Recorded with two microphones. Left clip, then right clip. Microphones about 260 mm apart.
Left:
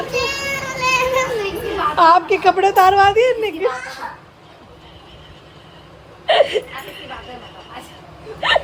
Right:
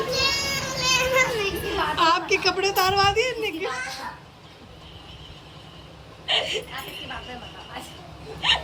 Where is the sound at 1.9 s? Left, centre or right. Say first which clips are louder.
Left 10 dB; right.